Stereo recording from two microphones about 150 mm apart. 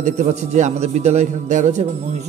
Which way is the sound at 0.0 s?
50° right (ahead or behind).